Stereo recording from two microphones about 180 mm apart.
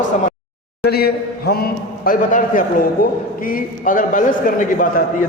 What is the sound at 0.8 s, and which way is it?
A man's voice, 60° left (ahead or behind).